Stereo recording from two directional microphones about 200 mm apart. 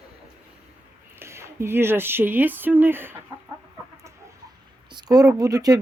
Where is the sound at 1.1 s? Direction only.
15° right (ahead or behind).